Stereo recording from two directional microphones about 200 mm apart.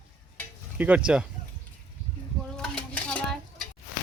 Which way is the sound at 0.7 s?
5° right (ahead or behind).